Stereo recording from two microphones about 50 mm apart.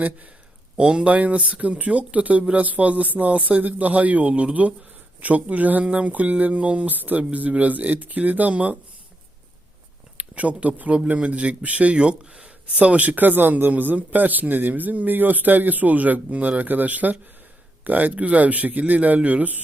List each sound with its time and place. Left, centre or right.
0.8 s speech: centre
1.0 s a man's voice: right
10.2 s speech: right
13.1 s a man's voice: right